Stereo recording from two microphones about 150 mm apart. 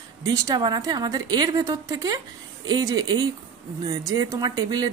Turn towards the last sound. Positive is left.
turn(degrees=-25)  # may be behind; listen again after turning